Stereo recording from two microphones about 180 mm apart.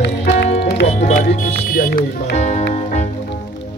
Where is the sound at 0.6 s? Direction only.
60° left (ahead or behind).